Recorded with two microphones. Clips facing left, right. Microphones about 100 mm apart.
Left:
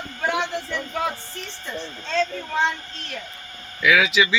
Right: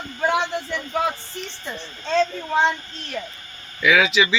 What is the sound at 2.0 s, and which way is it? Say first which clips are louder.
Speech: right 4 dB; 25° right (ahead or behind).